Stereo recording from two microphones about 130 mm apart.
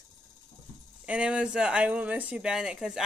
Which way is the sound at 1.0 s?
10° right (ahead or behind).